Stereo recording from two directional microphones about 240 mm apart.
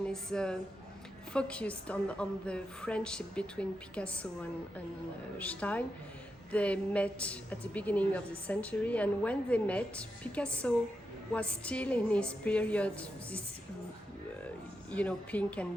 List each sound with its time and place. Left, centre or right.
0.0 s a woman's voice: centre
14.8 s a woman's voice: centre